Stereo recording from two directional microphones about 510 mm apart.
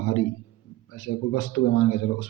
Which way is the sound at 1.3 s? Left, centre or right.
Left.